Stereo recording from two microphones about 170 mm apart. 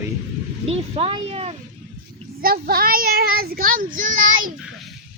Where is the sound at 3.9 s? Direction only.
50° right (ahead or behind).